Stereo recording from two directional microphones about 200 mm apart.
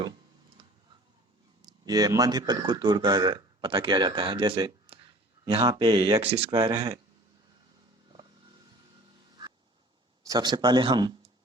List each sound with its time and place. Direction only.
1.6 s speech: 20° right (ahead or behind)
6.5 s speech: 15° right (ahead or behind)
10.2 s speech: 20° right (ahead or behind)